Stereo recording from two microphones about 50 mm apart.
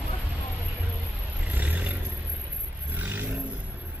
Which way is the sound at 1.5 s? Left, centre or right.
Right.